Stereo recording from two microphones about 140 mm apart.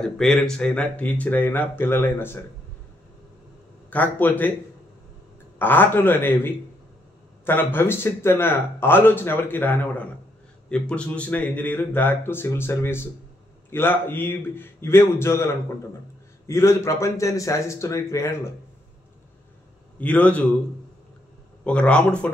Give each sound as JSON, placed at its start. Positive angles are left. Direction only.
{"t": 0.0, "sound": "a man's voice", "side_deg": 5}
{"t": 3.9, "sound": "a man's voice", "side_deg": 10}
{"t": 5.6, "sound": "a man's voice", "side_deg": 15}
{"t": 20.0, "sound": "a man's voice", "side_deg": 10}
{"t": 21.6, "sound": "a man's voice", "side_deg": 10}